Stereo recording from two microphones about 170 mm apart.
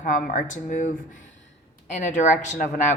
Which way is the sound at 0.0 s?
50° left (ahead or behind).